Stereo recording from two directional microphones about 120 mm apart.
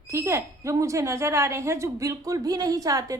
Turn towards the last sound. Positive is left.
turn(degrees=-30)  # may be behind; listen again after turning